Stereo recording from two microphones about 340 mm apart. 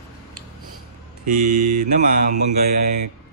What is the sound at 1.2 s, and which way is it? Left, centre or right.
Speech, right.